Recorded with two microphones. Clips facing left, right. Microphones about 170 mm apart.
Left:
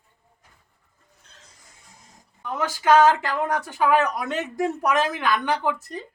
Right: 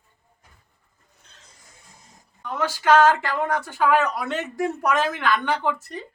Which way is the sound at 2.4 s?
15° left (ahead or behind).